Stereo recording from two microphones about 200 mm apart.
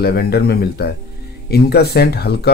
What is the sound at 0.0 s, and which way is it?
Speech, 50° left (ahead or behind).